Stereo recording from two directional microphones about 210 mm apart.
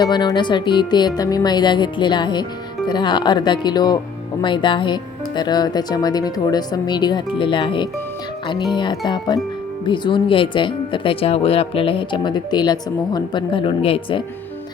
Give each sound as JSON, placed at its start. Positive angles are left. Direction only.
{"t": 0.0, "sound": "speech", "side_deg": 20}